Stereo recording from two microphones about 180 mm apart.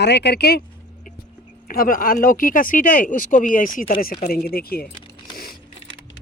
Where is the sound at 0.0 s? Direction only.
70° left (ahead or behind).